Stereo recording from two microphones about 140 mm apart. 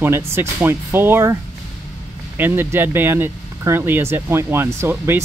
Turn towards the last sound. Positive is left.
turn(degrees=-20)  # may be behind; listen again after turning